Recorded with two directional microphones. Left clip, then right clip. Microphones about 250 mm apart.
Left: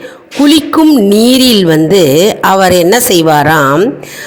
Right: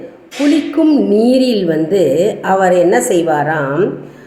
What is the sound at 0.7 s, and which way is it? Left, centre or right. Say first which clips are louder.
A woman's voice: left 5 dB; left.